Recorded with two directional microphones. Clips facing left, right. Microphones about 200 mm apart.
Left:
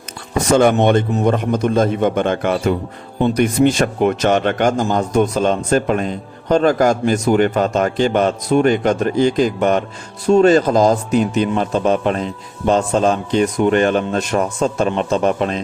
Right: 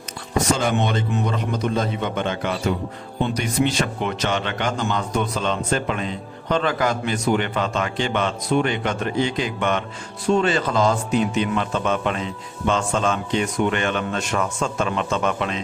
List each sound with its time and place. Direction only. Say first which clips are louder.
0.5 s speech: left 12 dB; 55° left (ahead or behind); by 15.6 s 40° left (ahead or behind)